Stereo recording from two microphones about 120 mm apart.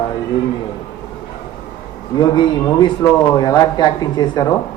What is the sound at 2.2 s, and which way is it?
A man's voice, 40° left (ahead or behind).